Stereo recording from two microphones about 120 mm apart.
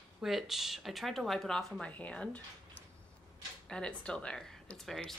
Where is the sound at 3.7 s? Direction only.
5° left (ahead or behind).